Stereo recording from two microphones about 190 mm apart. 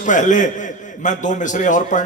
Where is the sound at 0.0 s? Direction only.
40° left (ahead or behind).